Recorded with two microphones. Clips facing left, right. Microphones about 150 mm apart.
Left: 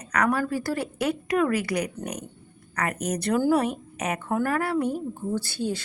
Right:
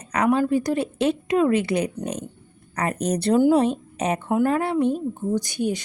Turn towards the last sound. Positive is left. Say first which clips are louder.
# right 4 dB
turn(degrees=-15)  # may be behind; listen again after turning